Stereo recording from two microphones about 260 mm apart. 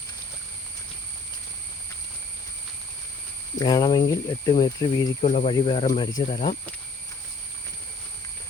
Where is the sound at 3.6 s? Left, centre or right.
Centre.